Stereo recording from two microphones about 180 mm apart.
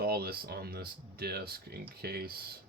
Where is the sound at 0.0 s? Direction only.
60° right (ahead or behind).